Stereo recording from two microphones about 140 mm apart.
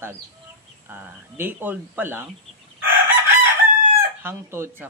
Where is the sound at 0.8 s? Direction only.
15° right (ahead or behind).